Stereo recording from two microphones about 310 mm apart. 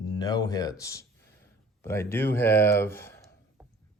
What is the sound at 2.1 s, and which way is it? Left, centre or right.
Speech, centre.